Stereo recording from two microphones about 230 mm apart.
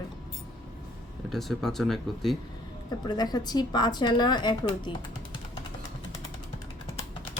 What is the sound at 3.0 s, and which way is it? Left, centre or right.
Speech, centre.